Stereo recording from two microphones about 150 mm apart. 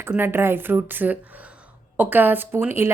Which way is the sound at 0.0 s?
15° right (ahead or behind).